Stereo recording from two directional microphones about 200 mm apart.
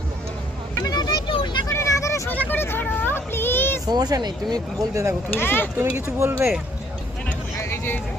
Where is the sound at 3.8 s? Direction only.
20° right (ahead or behind).